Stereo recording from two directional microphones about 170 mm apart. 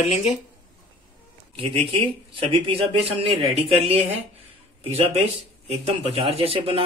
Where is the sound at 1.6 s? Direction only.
30° right (ahead or behind).